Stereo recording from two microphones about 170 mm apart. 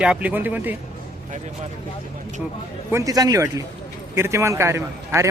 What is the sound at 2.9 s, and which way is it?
A man's voice, 20° right (ahead or behind).